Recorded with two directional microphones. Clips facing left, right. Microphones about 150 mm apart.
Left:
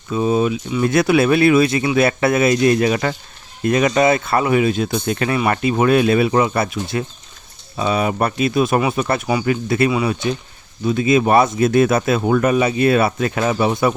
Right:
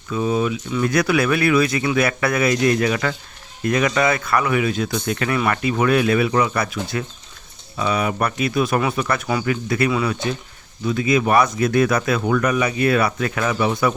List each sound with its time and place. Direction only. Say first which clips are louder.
0.1 s speech: left 3 dB; 25° left (ahead or behind)